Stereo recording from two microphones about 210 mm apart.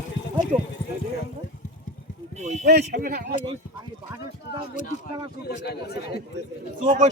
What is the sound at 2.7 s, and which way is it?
Speech, 50° right (ahead or behind).